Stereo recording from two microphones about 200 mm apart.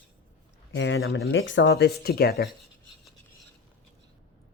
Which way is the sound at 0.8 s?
65° left (ahead or behind).